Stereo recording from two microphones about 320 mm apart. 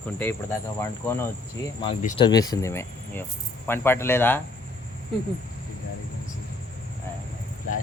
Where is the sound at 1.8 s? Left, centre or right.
Centre.